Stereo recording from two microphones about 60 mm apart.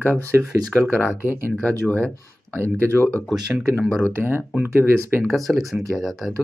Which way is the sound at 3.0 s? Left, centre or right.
Left.